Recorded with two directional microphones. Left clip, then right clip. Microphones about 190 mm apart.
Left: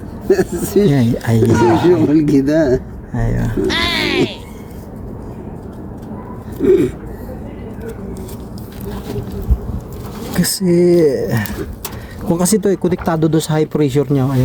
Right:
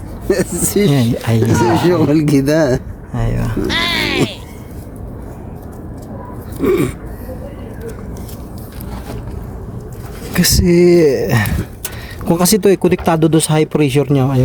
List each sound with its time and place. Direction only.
0.3 s speech: 50° right (ahead or behind)
1.2 s speech: 10° right (ahead or behind)
1.5 s speech: centre (ahead or behind)
1.9 s speech: 50° right (ahead or behind)
3.2 s speech: 10° right (ahead or behind)
3.7 s music: centre (ahead or behind)
6.6 s speech: 50° right (ahead or behind)
10.3 s speech: 25° right (ahead or behind)